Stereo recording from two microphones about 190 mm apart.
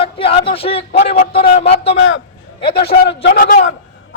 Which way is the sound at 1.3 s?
55° left (ahead or behind).